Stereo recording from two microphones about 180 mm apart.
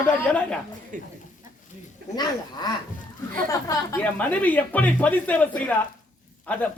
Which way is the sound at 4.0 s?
10° left (ahead or behind).